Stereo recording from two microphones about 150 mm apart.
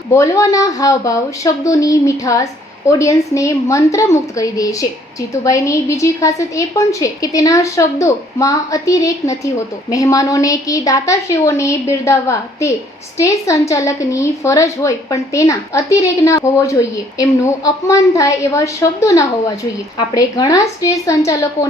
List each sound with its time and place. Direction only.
0.1 s a woman's voice: 20° left (ahead or behind)